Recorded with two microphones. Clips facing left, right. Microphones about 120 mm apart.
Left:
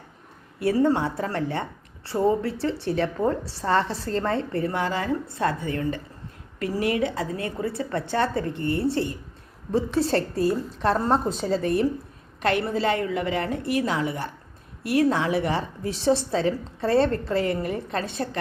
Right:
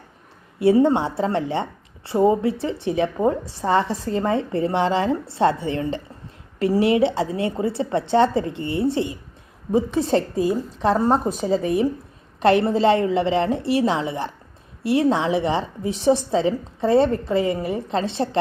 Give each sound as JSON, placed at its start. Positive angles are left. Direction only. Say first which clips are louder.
{"t": 0.6, "sound": "a woman's voice", "louder": "right 5 dB", "side_deg": -20}
{"t": 12.4, "sound": "a woman's voice", "louder": "right 7 dB", "side_deg": -30}